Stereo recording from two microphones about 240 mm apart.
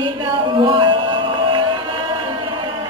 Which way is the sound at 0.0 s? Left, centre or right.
Right.